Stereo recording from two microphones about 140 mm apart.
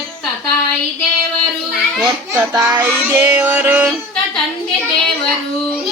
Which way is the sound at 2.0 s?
30° right (ahead or behind).